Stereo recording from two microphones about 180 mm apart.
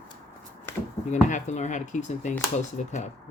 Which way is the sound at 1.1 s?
40° left (ahead or behind).